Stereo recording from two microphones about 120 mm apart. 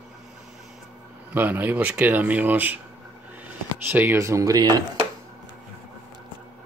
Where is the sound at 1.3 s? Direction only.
15° right (ahead or behind).